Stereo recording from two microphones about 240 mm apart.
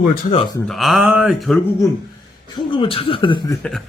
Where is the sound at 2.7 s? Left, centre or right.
Left.